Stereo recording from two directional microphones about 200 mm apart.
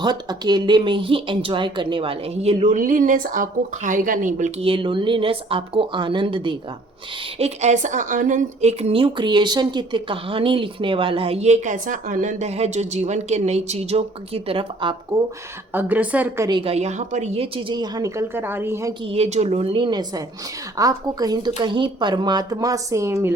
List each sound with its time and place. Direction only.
0.0 s speech: 20° right (ahead or behind)
15.7 s speech: 10° right (ahead or behind)
16.5 s speech: 25° right (ahead or behind)
19.0 s speech: 30° right (ahead or behind); by 23.3 s 15° right (ahead or behind)